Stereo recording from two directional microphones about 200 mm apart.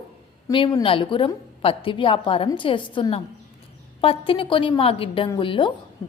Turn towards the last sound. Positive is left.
turn(degrees=25)  # may be behind; listen again after turning